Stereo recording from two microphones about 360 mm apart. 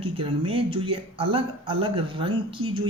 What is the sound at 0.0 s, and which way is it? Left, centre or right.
Speech, centre.